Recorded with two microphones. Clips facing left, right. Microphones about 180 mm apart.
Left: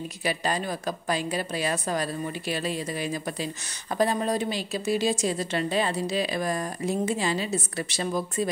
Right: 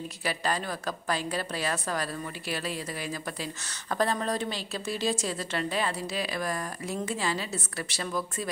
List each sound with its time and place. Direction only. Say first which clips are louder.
0.2 s a woman's voice: left 3 dB; 20° left (ahead or behind)